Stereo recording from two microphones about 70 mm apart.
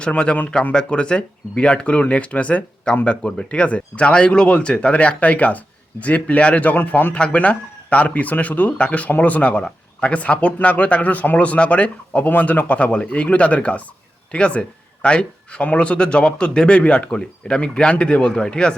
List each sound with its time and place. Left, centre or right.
0.1 s speech: centre